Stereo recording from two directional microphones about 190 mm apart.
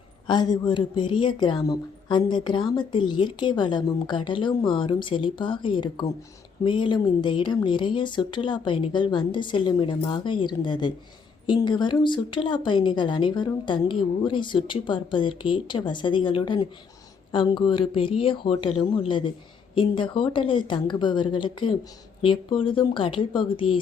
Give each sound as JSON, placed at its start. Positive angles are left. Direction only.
{"t": 0.3, "sound": "speech", "side_deg": 25}